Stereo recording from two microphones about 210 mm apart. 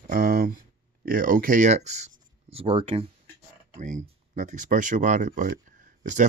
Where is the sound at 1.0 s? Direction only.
40° right (ahead or behind); by 3.1 s 25° right (ahead or behind).